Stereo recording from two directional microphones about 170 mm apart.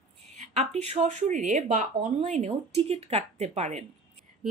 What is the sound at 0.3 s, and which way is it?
Speech, 40° right (ahead or behind).